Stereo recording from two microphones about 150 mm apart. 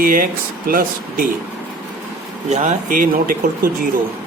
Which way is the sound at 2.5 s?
55° right (ahead or behind).